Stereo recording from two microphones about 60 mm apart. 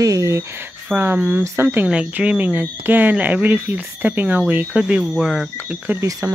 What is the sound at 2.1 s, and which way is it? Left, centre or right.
Speech, right.